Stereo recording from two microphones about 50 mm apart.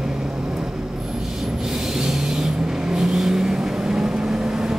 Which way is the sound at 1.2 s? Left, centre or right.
Centre.